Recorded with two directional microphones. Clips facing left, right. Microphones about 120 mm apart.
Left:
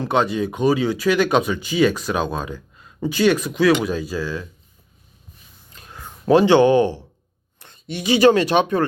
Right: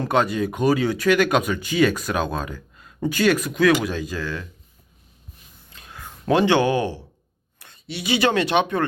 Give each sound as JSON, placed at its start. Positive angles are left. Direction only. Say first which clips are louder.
{"t": 0.1, "sound": "speech", "louder": "left 1 dB", "side_deg": 20}
{"t": 6.3, "sound": "speech", "louder": "left 5 dB", "side_deg": 15}
{"t": 7.9, "sound": "speech", "louder": "left 6 dB", "side_deg": 45}